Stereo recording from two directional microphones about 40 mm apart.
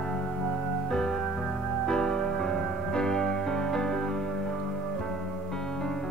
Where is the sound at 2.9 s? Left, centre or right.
Centre.